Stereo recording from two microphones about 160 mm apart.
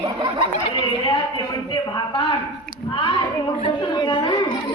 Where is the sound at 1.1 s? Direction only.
30° left (ahead or behind).